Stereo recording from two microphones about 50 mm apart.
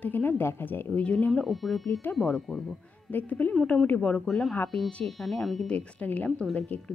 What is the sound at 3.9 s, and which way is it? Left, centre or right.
Speech, left.